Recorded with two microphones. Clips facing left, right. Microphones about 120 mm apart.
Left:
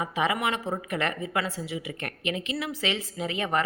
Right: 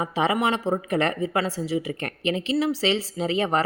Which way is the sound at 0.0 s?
30° right (ahead or behind).